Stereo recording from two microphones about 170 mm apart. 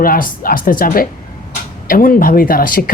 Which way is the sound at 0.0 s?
60° left (ahead or behind).